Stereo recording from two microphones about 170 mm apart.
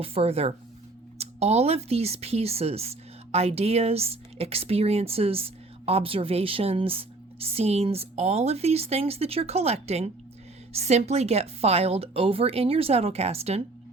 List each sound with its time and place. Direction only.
0.0 s speech: 35° right (ahead or behind)